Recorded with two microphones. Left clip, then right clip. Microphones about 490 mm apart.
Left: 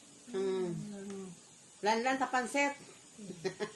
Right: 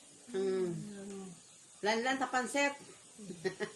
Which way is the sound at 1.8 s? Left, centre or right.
Left.